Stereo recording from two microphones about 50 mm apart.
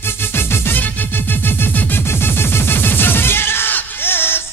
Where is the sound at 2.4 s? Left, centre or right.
Left.